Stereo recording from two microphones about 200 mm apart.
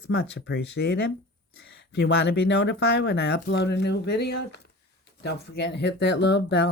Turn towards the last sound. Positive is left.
turn(degrees=60)  # may be behind; listen again after turning